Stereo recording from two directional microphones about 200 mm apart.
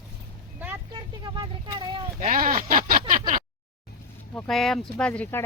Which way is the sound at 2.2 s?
45° right (ahead or behind).